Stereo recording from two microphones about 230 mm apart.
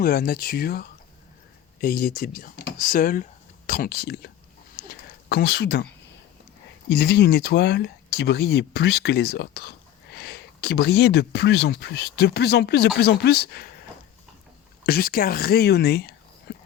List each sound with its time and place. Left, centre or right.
0.0 s speech: left
4.8 s a sound: left
5.3 s speech: left
6.9 s speech: left
14.8 s speech: left
16.5 s a sound: left